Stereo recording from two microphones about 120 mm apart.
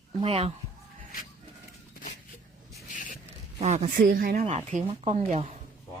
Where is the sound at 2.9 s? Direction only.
90° left.